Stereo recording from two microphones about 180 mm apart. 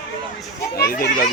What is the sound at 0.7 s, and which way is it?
Speech, 55° left (ahead or behind).